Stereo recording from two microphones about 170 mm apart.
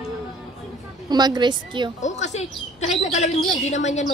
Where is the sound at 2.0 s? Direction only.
45° left (ahead or behind).